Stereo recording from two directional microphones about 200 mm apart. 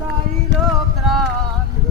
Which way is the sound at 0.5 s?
60° right (ahead or behind).